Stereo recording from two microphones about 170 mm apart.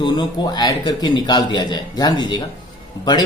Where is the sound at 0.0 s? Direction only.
25° left (ahead or behind).